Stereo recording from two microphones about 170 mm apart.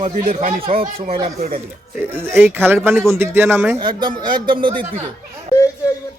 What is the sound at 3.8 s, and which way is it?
Speech, 25° right (ahead or behind).